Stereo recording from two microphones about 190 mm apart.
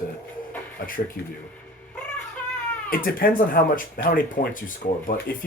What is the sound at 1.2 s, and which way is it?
Speech, 60° left (ahead or behind).